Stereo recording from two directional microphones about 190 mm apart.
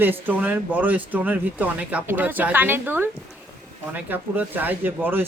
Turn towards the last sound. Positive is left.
turn(degrees=-10)  # may be behind; listen again after turning